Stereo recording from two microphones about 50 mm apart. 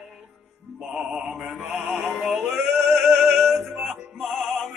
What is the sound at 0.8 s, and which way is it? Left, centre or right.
Mantra, centre.